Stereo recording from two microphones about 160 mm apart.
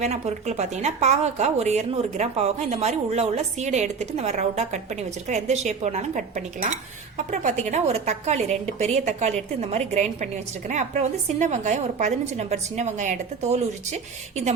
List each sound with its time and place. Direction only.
0.0 s speech: 45° right (ahead or behind)